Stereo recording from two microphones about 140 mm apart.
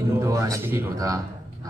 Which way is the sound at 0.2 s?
20° right (ahead or behind).